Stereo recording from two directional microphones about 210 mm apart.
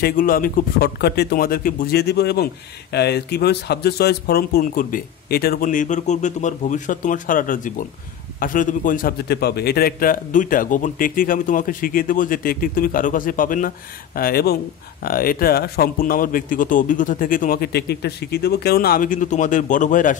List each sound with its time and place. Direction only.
0.0 s a man's voice: 40° left (ahead or behind)